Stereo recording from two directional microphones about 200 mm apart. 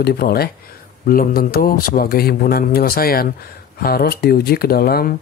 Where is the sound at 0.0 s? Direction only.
50° left (ahead or behind).